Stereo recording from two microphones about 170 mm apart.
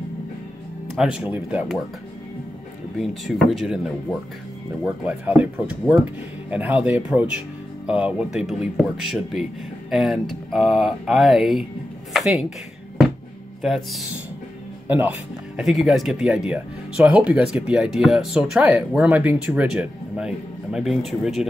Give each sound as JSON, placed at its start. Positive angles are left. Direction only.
{"t": 0.9, "sound": "speech", "side_deg": -5}
{"t": 3.0, "sound": "speech", "side_deg": 0}
{"t": 12.1, "sound": "music", "side_deg": 0}
{"t": 13.6, "sound": "speech", "side_deg": 0}